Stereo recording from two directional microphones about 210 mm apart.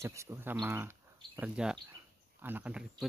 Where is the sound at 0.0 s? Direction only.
15° right (ahead or behind).